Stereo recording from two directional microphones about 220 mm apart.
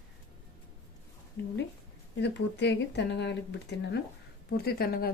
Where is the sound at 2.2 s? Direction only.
50° left (ahead or behind).